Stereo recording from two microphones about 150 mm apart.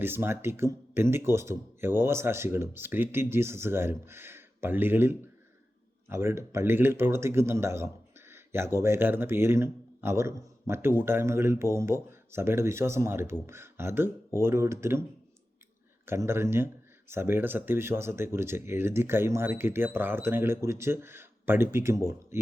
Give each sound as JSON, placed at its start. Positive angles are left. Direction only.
{"t": 0.0, "sound": "speech", "side_deg": -15}
{"t": 16.0, "sound": "speech", "side_deg": -15}